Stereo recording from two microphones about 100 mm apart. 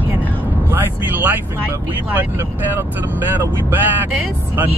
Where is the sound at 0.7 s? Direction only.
20° right (ahead or behind).